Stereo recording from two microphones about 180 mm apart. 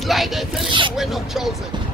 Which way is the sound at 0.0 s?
Centre (ahead or behind).